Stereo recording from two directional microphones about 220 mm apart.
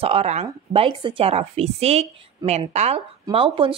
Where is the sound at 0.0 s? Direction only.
25° right (ahead or behind).